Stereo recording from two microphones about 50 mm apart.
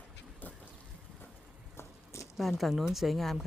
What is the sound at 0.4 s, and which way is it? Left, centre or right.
Duck, left.